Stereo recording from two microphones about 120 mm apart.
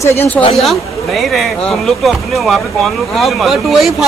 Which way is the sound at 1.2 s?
Centre (ahead or behind).